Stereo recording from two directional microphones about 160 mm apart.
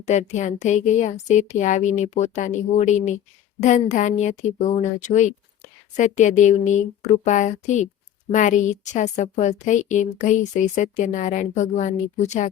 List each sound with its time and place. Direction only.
0.0 s a woman's voice: 45° left (ahead or behind)